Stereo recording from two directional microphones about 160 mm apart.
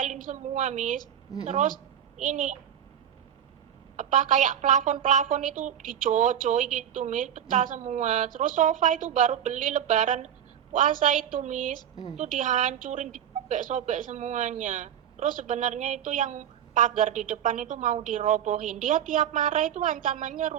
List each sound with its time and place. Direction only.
0.0 s a woman's voice: 50° right (ahead or behind)
3.9 s a woman's voice: 55° right (ahead or behind)
11.8 s a woman's voice: 25° left (ahead or behind)
12.1 s a woman's voice: 50° right (ahead or behind)